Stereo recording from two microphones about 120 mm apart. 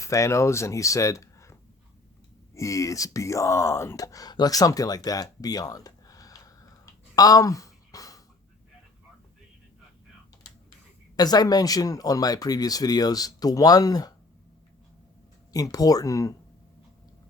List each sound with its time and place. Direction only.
0.0 s speech: 25° left (ahead or behind)
2.6 s speech: 25° left (ahead or behind)
7.2 s a sound: 30° left (ahead or behind)
11.2 s speech: 35° left (ahead or behind)
15.5 s speech: 30° left (ahead or behind)